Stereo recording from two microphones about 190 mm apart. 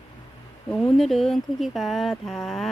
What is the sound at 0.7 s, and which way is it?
A woman's voice, centre (ahead or behind).